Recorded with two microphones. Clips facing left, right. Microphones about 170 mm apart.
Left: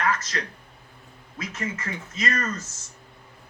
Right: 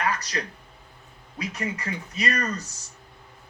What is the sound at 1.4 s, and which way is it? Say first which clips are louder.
Speech: right 1 dB; 20° right (ahead or behind).